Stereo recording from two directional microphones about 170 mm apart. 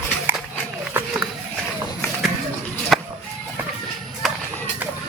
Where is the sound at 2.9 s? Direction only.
Centre (ahead or behind).